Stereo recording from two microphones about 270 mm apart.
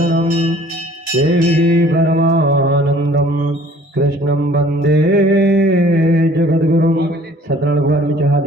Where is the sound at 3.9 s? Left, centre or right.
Right.